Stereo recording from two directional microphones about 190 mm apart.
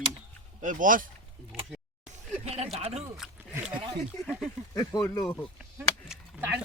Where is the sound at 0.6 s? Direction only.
45° right (ahead or behind).